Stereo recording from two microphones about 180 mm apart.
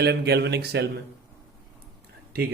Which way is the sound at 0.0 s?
65° right (ahead or behind).